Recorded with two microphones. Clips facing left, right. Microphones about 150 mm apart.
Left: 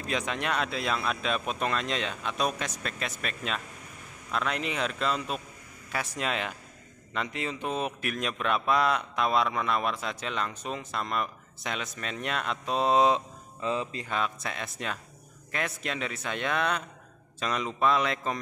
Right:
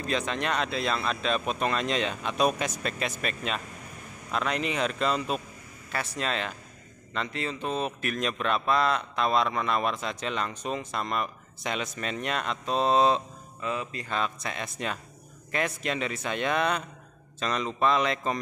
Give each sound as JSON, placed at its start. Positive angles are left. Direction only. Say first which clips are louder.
{"t": 0.0, "sound": "speech", "louder": "right 2 dB", "side_deg": 10}
{"t": 5.9, "sound": "speech", "louder": "right 1 dB", "side_deg": 10}
{"t": 13.6, "sound": "speech", "louder": "left 2 dB", "side_deg": 25}
{"t": 14.0, "sound": "speech", "louder": "right 1 dB", "side_deg": 5}